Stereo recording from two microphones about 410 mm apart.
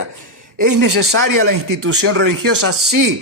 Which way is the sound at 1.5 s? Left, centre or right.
Right.